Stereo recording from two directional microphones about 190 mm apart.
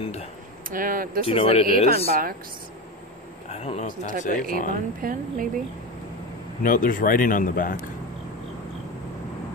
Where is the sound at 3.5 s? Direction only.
35° left (ahead or behind).